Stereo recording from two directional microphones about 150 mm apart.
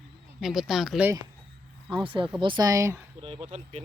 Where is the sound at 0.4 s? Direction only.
Centre (ahead or behind).